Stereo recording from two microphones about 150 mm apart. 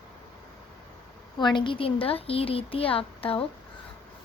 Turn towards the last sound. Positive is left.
turn(degrees=40)  # may be behind; listen again after turning